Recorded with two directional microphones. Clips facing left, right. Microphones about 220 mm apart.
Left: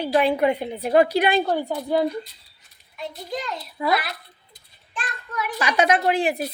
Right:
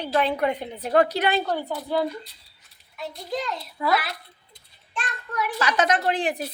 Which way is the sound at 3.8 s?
20° left (ahead or behind).